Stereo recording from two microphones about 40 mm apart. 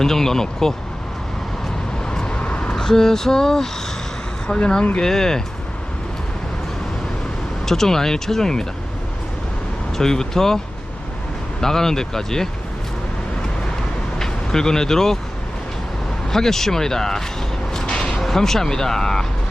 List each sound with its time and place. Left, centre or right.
0.0 s speech: centre
2.0 s vehicle: left
2.7 s speech: centre
4.9 s speech: centre
7.6 s speech: centre
10.0 s speech: centre
11.6 s speech: centre
14.2 s speech: centre
16.3 s speech: centre